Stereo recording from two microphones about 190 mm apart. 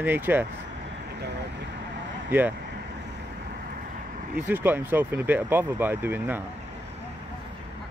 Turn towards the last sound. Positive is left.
turn(degrees=-10)  # may be behind; listen again after turning